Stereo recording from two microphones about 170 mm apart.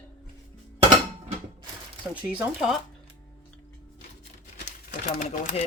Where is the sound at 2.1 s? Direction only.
10° right (ahead or behind).